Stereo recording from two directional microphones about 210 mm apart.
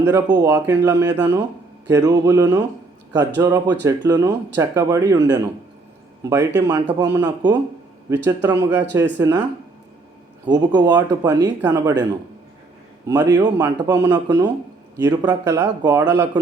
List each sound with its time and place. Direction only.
0.0 s speech: 10° right (ahead or behind)
10.4 s speech: 20° right (ahead or behind)
13.1 s speech: 15° right (ahead or behind)